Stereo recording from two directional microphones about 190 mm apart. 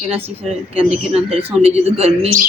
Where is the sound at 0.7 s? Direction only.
30° right (ahead or behind).